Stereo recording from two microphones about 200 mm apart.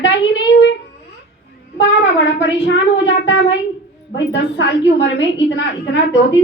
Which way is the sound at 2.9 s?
60° left (ahead or behind).